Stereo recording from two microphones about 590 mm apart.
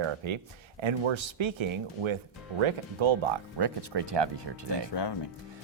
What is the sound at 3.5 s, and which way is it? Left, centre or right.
Speech, right.